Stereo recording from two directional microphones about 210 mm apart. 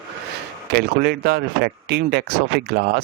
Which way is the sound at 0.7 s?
50° right (ahead or behind).